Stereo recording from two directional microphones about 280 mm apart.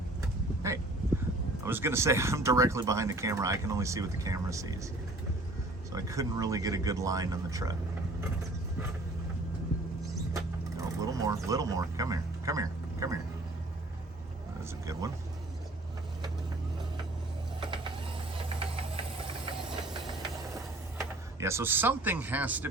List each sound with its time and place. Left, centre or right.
0.6 s a sound: centre
1.6 s speech: centre
5.9 s speech: centre
10.8 s vehicle: centre
11.4 s music: centre
14.6 s vehicle: centre
17.6 s mechanisms: centre
18.4 s a sound: centre
21.0 s speech: centre